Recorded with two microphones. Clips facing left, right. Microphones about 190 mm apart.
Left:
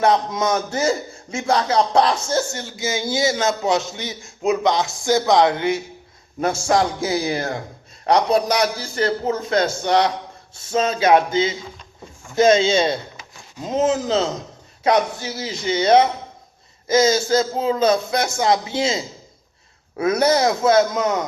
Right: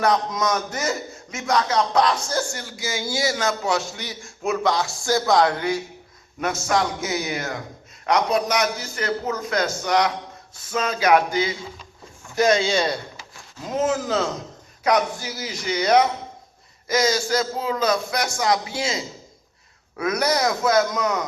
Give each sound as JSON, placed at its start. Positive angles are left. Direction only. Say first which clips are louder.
{"t": 0.0, "sound": "a man's voice", "louder": "left 3 dB", "side_deg": 25}